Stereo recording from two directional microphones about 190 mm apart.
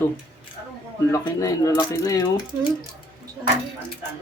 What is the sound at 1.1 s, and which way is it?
Speech, 15° left (ahead or behind).